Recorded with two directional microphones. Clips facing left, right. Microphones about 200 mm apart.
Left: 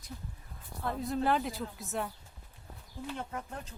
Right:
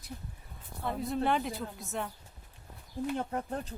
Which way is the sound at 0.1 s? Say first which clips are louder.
Right 1 dB; 35° right (ahead or behind).